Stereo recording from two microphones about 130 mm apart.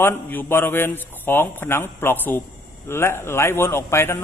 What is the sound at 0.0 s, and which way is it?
A man's voice, 15° left (ahead or behind).